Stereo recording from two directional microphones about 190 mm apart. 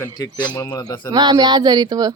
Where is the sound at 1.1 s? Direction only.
20° right (ahead or behind).